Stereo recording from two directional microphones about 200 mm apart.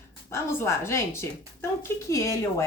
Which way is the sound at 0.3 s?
15° left (ahead or behind).